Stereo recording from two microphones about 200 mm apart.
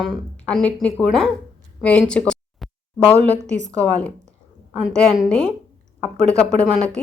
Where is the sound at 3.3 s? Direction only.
35° right (ahead or behind).